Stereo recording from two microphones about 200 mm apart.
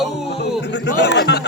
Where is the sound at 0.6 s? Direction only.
60° left (ahead or behind).